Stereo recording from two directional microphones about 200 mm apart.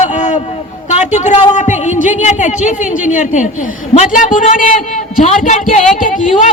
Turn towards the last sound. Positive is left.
turn(degrees=40)  # may be behind; listen again after turning